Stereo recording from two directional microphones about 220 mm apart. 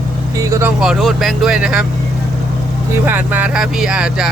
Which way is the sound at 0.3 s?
15° right (ahead or behind).